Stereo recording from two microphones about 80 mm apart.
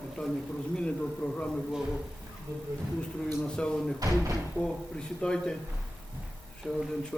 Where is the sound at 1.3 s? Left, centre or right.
Centre.